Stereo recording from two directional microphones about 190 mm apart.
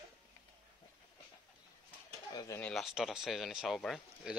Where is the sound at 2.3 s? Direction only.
20° left (ahead or behind).